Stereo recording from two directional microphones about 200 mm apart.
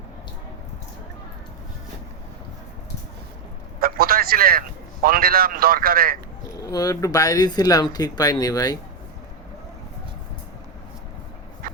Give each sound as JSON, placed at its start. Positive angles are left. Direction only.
{"t": 3.8, "sound": "a sound", "side_deg": -50}
{"t": 5.0, "sound": "a man's voice", "side_deg": -45}
{"t": 6.6, "sound": "speech", "side_deg": 15}
{"t": 11.6, "sound": "dog", "side_deg": -45}